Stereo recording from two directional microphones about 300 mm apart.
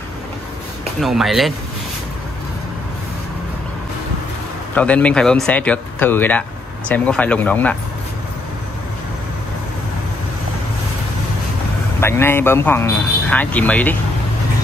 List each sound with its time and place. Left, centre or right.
1.0 s speech: centre
4.7 s speech: centre
12.0 s speech: centre